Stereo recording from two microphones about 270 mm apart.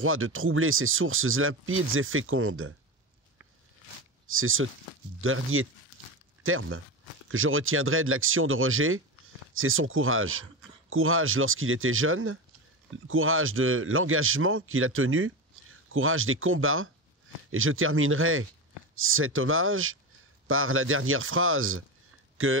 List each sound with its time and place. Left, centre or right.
0.0 s speech: right
4.3 s speech: right